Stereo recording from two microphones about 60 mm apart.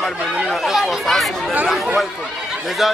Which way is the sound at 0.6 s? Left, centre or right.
Centre.